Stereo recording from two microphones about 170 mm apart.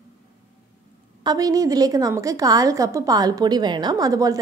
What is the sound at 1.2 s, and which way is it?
A woman's voice, 25° right (ahead or behind).